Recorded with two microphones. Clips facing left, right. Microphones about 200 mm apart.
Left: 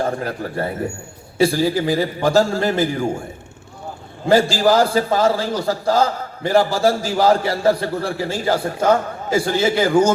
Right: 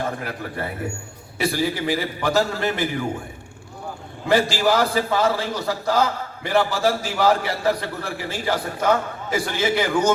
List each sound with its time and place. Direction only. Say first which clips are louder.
0.0 s a man's voice: left 5 dB; 35° left (ahead or behind)
4.3 s a man's voice: left 4 dB; 35° left (ahead or behind)